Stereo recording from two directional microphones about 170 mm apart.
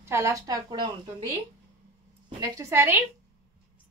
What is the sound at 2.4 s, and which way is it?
Speech, 20° right (ahead or behind).